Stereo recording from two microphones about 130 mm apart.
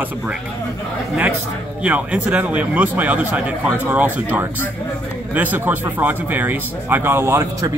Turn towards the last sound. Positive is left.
turn(degrees=-25)  # may be behind; listen again after turning